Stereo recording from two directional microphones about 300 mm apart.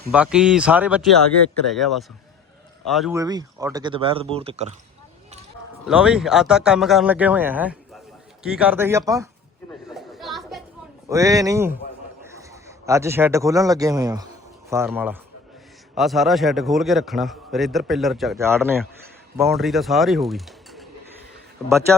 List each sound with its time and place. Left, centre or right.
0.1 s a man's voice: centre
3.2 s speech: centre
5.9 s a man's voice: centre
9.9 s chatter: centre
11.1 s a man's voice: centre